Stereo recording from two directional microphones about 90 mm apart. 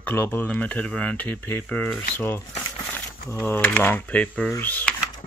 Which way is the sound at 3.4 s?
20° left (ahead or behind).